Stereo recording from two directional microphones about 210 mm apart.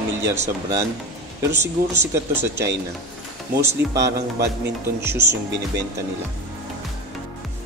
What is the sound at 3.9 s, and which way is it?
Speech, 55° right (ahead or behind).